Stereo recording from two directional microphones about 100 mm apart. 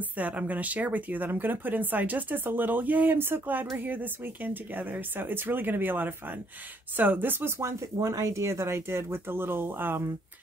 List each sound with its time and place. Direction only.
0.2 s speech: 15° right (ahead or behind)